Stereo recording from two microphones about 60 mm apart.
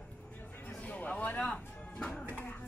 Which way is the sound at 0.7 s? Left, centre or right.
Left.